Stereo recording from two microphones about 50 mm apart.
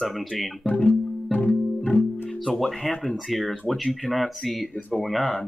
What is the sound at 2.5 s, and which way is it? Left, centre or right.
Speech, centre.